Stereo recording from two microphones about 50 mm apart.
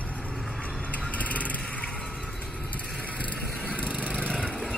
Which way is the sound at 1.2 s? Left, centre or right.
Left.